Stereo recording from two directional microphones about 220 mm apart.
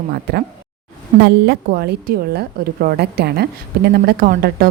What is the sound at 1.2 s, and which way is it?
A woman's voice, 45° right (ahead or behind).